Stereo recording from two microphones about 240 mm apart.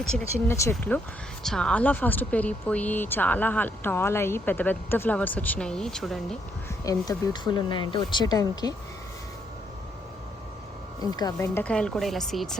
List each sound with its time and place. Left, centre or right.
0.2 s speech: centre
6.8 s speech: centre
11.0 s speech: centre